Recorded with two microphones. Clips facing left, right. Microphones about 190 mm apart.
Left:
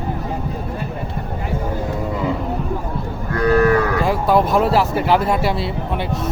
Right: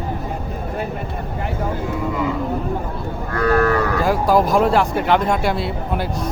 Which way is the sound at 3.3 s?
20° left (ahead or behind).